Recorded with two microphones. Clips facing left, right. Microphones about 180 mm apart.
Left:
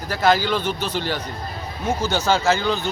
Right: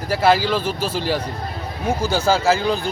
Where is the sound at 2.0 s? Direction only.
30° right (ahead or behind).